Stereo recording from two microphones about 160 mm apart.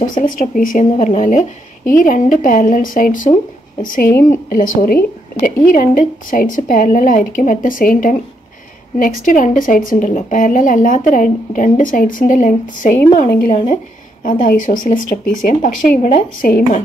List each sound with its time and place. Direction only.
0.0 s a woman's voice: 55° left (ahead or behind)
14.5 s a woman's voice: 55° left (ahead or behind)